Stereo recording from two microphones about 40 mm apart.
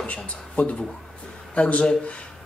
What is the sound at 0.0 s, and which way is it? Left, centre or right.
A man's voice, left.